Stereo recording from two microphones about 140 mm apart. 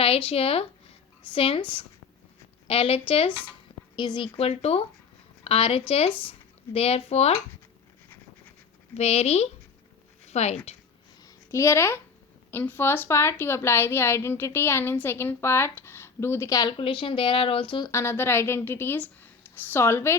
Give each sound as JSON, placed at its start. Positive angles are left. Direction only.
{"t": 0.0, "sound": "a woman's voice", "side_deg": 40}
{"t": 9.0, "sound": "speech", "side_deg": 50}
{"t": 11.5, "sound": "a child's voice", "side_deg": 20}
{"t": 16.7, "sound": "speech", "side_deg": 40}
{"t": 17.8, "sound": "a woman's voice", "side_deg": 20}